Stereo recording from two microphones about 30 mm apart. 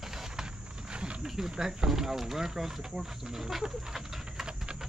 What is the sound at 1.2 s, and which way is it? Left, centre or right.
Wild animals, centre.